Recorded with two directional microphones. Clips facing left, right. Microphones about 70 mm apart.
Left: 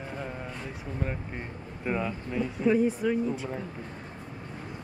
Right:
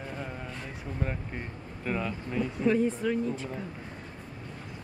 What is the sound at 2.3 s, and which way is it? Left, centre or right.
Speech, centre.